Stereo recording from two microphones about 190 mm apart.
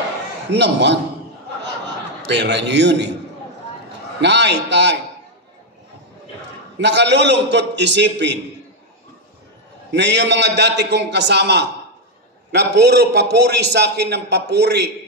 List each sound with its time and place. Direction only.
0.5 s a man's voice: 65° right (ahead or behind)
2.2 s a man's voice: 65° right (ahead or behind)
4.2 s a man's voice: 65° right (ahead or behind)
6.8 s a man's voice: 65° right (ahead or behind)
9.9 s a man's voice: 65° right (ahead or behind)